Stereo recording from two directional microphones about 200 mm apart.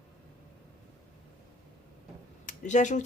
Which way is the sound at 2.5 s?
35° left (ahead or behind).